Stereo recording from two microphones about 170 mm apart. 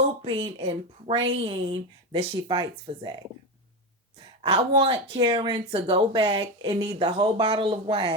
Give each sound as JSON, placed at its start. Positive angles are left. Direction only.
{"t": 0.0, "sound": "speech", "side_deg": -35}
{"t": 4.2, "sound": "speech", "side_deg": -30}